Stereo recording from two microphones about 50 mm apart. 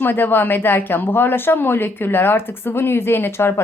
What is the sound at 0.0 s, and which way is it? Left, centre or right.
Speech, left.